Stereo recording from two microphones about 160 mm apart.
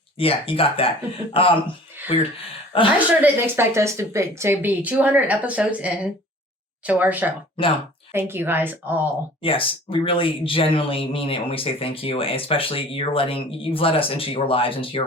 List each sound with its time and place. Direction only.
0.2 s speech: 35° left (ahead or behind)
3.2 s a woman's voice: 10° right (ahead or behind)
9.4 s speech: 35° left (ahead or behind)